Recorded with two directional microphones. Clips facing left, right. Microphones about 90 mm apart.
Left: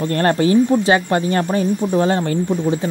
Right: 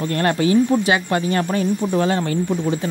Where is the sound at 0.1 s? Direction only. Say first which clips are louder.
Left 2 dB; 35° left (ahead or behind).